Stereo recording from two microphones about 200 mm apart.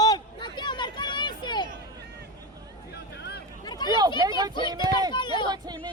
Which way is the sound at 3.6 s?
20° left (ahead or behind).